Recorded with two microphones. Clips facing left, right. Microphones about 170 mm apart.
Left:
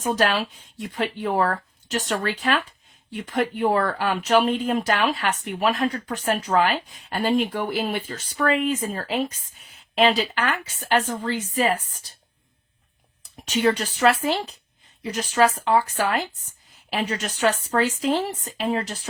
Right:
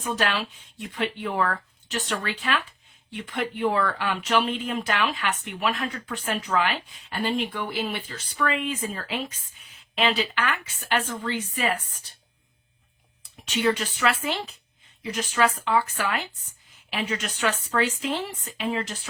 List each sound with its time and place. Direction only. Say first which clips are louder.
0.0 s speech: left 5 dB; 40° left (ahead or behind)
13.4 s speech: left 3 dB; 40° left (ahead or behind)